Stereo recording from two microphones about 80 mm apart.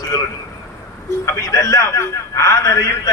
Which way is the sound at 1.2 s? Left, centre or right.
Left.